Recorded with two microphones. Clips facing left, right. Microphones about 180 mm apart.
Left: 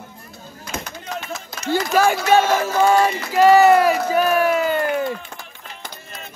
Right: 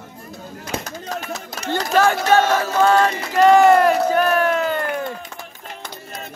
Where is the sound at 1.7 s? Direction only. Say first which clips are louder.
Even; 10° left (ahead or behind).